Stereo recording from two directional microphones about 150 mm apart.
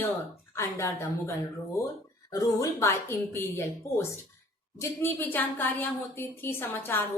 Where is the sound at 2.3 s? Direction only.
20° left (ahead or behind).